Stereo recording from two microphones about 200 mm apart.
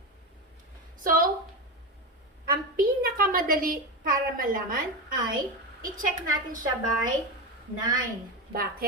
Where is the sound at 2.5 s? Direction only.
45° right (ahead or behind).